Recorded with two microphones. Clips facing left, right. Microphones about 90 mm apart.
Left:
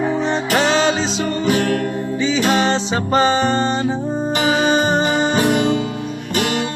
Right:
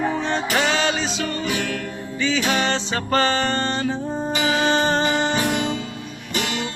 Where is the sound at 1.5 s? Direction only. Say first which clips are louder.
Left 8 dB; 45° left (ahead or behind).